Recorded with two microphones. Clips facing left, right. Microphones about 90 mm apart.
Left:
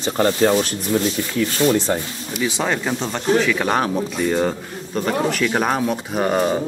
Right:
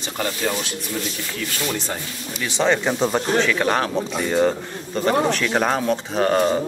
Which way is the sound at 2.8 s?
5° right (ahead or behind).